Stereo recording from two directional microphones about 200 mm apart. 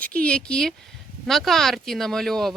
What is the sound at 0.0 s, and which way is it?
Speech, 5° left (ahead or behind).